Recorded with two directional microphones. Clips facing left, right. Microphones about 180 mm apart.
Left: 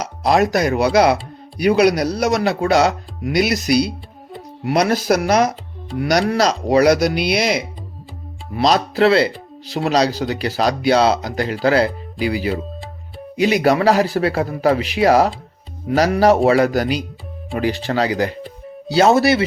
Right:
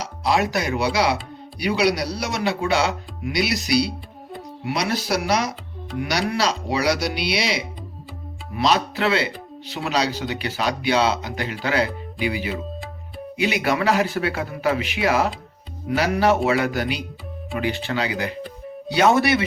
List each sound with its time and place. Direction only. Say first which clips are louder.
0.0 s speech: left 5 dB; 45° left (ahead or behind)
8.5 s speech: left 5 dB; 40° left (ahead or behind)